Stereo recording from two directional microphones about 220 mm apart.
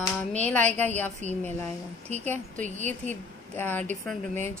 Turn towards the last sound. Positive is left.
turn(degrees=10)  # may be behind; listen again after turning